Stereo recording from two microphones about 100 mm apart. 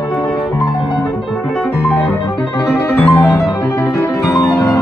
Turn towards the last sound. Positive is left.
turn(degrees=30)  # may be behind; listen again after turning